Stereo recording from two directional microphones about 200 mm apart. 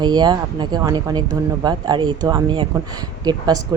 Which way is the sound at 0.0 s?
20° right (ahead or behind).